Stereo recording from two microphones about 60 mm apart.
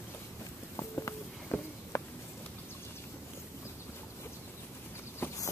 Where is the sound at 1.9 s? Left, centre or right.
Left.